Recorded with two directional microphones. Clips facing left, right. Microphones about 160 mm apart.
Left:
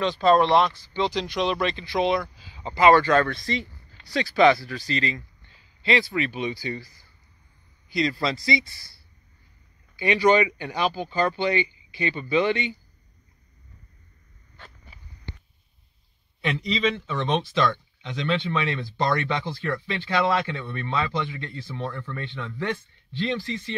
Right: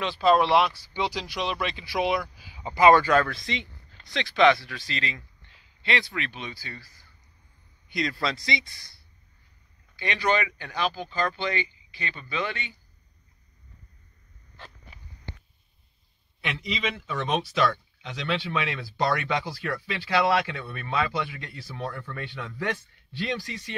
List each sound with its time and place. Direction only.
0.0 s speech: 5° right (ahead or behind); by 7.1 s 15° left (ahead or behind)
7.9 s speech: centre (ahead or behind)
9.9 s speech: 10° left (ahead or behind)
17.2 s speech: 5° right (ahead or behind)